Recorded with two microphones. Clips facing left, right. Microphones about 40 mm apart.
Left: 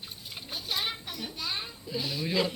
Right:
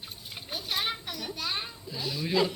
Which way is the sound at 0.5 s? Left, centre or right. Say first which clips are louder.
Right 1 dB; right.